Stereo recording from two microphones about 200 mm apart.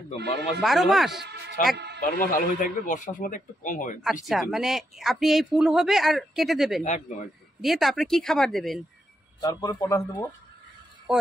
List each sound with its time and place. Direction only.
0.6 s speech: centre (ahead or behind)
1.6 s a man's voice: 40° left (ahead or behind)
4.0 s speech: centre (ahead or behind)
6.8 s a man's voice: 35° left (ahead or behind)
7.6 s speech: centre (ahead or behind)
9.4 s a man's voice: 20° left (ahead or behind)
11.1 s speech: centre (ahead or behind)